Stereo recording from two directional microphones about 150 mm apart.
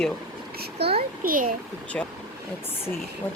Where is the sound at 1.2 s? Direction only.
70° right (ahead or behind).